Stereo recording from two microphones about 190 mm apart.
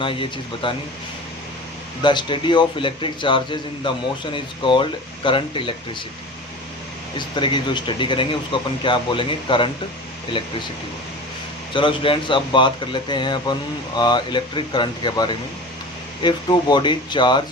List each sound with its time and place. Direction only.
0.0 s speech: 25° left (ahead or behind)
2.0 s speech: 25° left (ahead or behind)
7.2 s speech: 25° left (ahead or behind)
11.7 s speech: 25° left (ahead or behind)